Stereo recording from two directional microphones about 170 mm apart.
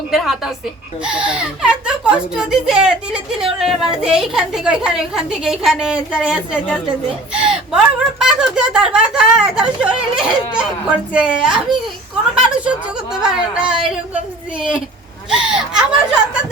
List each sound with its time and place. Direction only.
0.1 s a child's voice: centre (ahead or behind)
15.3 s a child's voice: 5° right (ahead or behind)